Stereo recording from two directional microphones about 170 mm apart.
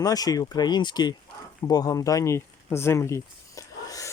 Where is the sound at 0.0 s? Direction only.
20° left (ahead or behind).